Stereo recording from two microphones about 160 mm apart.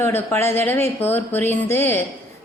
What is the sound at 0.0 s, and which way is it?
A woman's voice, 15° left (ahead or behind).